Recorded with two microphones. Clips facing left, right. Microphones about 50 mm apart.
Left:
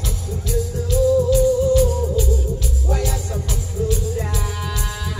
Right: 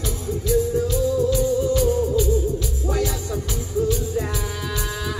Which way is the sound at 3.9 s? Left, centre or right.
Right.